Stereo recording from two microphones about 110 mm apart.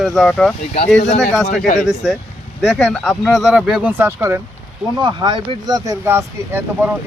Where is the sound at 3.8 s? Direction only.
15° right (ahead or behind).